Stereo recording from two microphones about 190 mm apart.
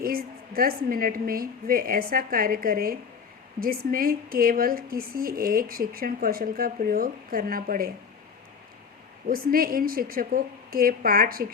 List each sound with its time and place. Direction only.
0.0 s speech: 50° right (ahead or behind)
9.2 s speech: 50° right (ahead or behind)